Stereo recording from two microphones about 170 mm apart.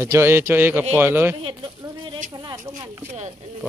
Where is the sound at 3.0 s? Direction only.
45° right (ahead or behind).